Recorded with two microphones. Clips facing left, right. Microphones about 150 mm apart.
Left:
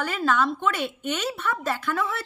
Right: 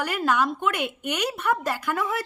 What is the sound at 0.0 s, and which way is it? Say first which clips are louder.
Speech: even; 15° right (ahead or behind).